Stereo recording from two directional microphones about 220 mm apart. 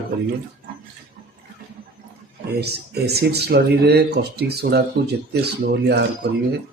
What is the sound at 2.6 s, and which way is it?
Speech, 45° right (ahead or behind).